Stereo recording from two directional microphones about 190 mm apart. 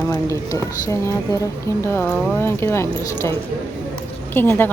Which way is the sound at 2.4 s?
10° left (ahead or behind).